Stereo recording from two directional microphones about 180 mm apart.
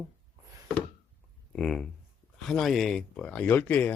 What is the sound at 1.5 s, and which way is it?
Speech, centre (ahead or behind).